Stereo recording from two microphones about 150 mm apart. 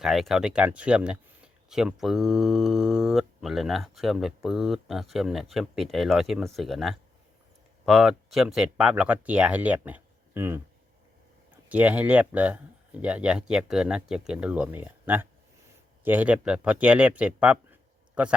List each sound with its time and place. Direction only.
0.0 s speech: centre (ahead or behind)
11.7 s speech: 10° right (ahead or behind)